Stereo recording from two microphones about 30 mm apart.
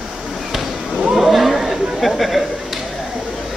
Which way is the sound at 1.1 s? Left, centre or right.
Centre.